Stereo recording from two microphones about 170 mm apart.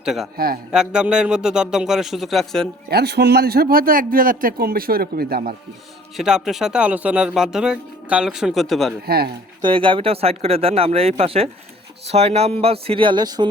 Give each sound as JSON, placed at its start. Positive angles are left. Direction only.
{"t": 0.0, "sound": "a man's voice", "side_deg": -5}
{"t": 0.3, "sound": "a man's voice", "side_deg": -60}
{"t": 0.7, "sound": "speech", "side_deg": -5}
{"t": 2.9, "sound": "a man's voice", "side_deg": -75}
{"t": 6.1, "sound": "speech", "side_deg": -5}
{"t": 9.0, "sound": "a man's voice", "side_deg": -65}
{"t": 9.6, "sound": "speech", "side_deg": -30}